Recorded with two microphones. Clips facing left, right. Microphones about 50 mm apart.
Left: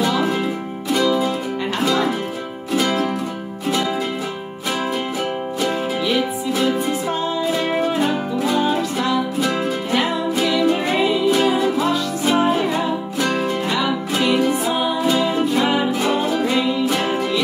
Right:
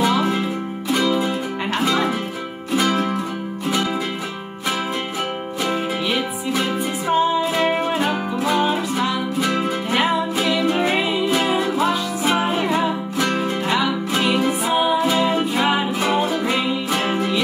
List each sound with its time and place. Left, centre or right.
0.9 s music: centre
5.6 s music: centre
11.3 s music: centre
14.6 s music: centre